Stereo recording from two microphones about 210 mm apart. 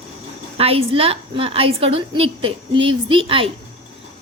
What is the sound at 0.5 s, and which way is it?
A woman's voice, 30° right (ahead or behind).